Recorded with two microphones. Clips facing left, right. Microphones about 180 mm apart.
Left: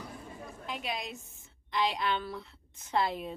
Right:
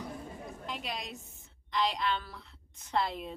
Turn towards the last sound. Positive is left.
turn(degrees=5)  # may be behind; listen again after turning